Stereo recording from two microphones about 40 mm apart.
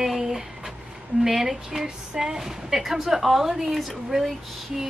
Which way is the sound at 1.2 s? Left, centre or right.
Centre.